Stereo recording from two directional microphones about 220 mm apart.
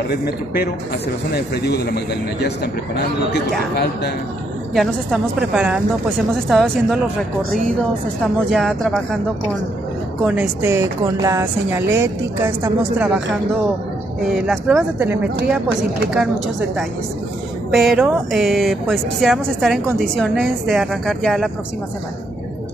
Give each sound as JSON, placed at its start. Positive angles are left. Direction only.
{"t": 0.1, "sound": "speech", "side_deg": 45}
{"t": 3.3, "sound": "speech", "side_deg": 45}
{"t": 4.7, "sound": "a woman's voice", "side_deg": 0}
{"t": 8.2, "sound": "a woman's voice", "side_deg": 0}
{"t": 10.2, "sound": "speech", "side_deg": -5}
{"t": 14.2, "sound": "a woman's voice", "side_deg": 0}
{"t": 17.7, "sound": "a woman's voice", "side_deg": -5}